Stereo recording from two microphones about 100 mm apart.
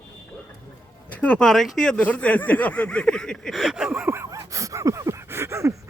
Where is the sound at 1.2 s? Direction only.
15° left (ahead or behind); by 4.1 s 10° right (ahead or behind).